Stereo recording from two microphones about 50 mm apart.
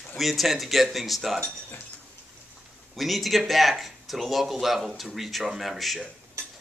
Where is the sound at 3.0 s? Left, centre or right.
Centre.